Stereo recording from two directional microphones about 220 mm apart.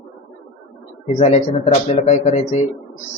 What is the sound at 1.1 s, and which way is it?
A man's voice, 30° left (ahead or behind).